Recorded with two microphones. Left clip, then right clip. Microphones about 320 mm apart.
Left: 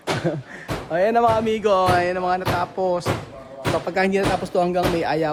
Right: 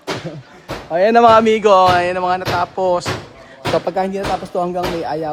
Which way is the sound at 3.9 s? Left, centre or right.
Centre.